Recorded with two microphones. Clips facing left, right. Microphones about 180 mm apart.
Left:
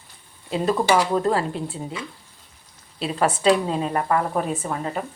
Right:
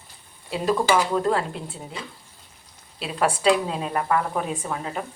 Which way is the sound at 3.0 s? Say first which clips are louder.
Left 2 dB; centre (ahead or behind).